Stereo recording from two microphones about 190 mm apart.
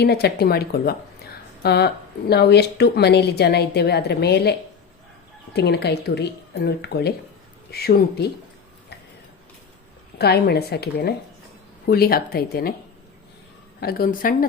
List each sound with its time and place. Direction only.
0.0 s a woman's voice: 55° left (ahead or behind)
5.5 s a woman's voice: 60° left (ahead or behind)
10.2 s a woman's voice: 60° left (ahead or behind)
13.8 s a woman's voice: 50° left (ahead or behind)